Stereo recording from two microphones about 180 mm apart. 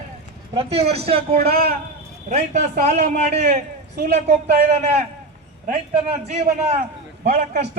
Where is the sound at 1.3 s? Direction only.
55° right (ahead or behind).